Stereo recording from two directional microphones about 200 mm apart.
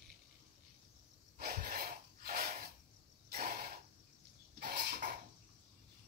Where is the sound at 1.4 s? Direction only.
40° right (ahead or behind).